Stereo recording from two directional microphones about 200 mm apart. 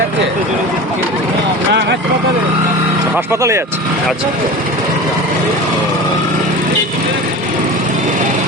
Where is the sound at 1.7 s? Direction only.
55° right (ahead or behind).